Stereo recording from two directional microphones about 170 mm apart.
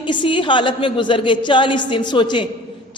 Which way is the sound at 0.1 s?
30° left (ahead or behind).